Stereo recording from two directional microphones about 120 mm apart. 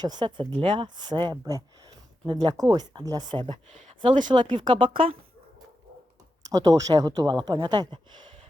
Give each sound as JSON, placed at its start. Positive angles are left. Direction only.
{"t": 0.0, "sound": "speech", "side_deg": -35}
{"t": 3.7, "sound": "speech", "side_deg": -65}
{"t": 4.0, "sound": "speech", "side_deg": -40}
{"t": 6.4, "sound": "speech", "side_deg": -30}